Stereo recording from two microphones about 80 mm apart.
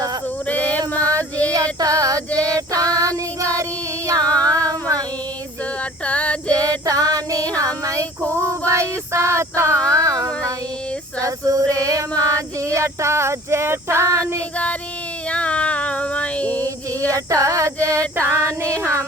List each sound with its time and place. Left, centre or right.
0.8 s a sound: right
1.5 s female singing: right
4.4 s a sound: right
6.1 s female singing: centre
6.5 s female singing: right
7.6 s child singing: right
8.4 s female singing: right
9.9 s child singing: right
11.2 s female singing: right
15.3 s a sound: centre
16.5 s female singing: right